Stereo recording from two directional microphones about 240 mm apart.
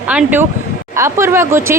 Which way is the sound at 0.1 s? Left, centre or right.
Centre.